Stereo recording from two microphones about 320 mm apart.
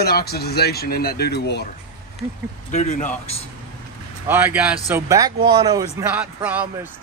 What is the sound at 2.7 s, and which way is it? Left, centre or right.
Speech, left.